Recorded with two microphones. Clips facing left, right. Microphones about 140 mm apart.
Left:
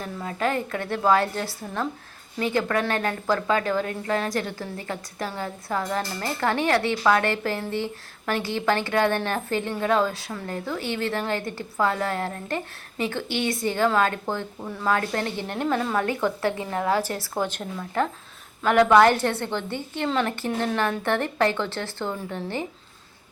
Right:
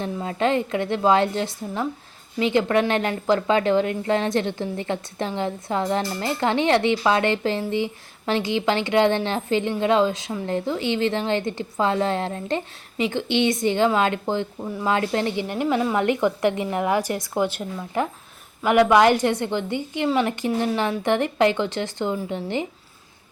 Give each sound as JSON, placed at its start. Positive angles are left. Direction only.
{"t": 0.0, "sound": "a woman's voice", "side_deg": -25}